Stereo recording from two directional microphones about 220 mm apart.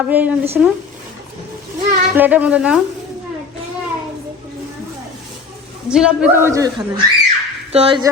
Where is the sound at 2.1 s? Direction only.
10° right (ahead or behind).